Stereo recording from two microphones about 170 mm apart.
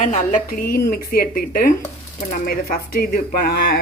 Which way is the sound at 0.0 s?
45° left (ahead or behind).